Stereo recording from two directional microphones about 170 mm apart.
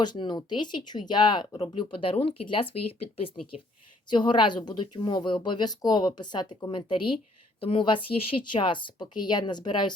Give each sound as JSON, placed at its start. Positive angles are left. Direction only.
{"t": 0.0, "sound": "speech", "side_deg": 25}